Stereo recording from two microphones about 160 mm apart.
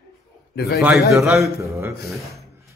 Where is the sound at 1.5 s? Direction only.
20° right (ahead or behind).